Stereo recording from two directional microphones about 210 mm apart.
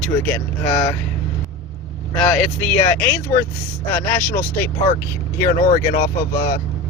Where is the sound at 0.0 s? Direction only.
5° left (ahead or behind).